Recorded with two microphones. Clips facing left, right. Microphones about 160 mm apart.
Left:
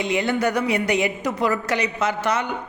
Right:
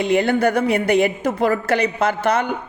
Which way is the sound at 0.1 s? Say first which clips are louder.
Right 5 dB; 55° right (ahead or behind).